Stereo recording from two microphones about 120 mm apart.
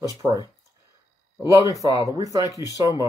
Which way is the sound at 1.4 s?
25° right (ahead or behind).